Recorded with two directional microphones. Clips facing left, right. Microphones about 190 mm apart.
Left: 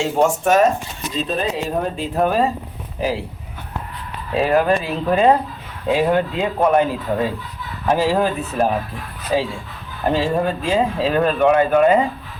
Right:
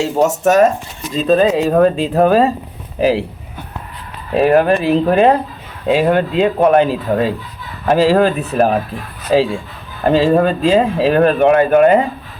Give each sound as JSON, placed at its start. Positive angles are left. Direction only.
{"t": 0.0, "sound": "speech", "side_deg": -40}
{"t": 1.3, "sound": "speech", "side_deg": -85}
{"t": 4.4, "sound": "speech", "side_deg": -55}
{"t": 8.5, "sound": "speech", "side_deg": -75}
{"t": 9.3, "sound": "speech", "side_deg": -90}
{"t": 11.0, "sound": "speech", "side_deg": -70}